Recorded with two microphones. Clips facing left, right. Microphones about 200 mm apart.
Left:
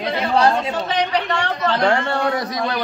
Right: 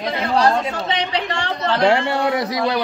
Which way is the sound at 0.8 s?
25° right (ahead or behind).